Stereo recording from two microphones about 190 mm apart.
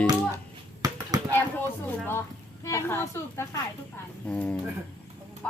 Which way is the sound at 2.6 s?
15° left (ahead or behind).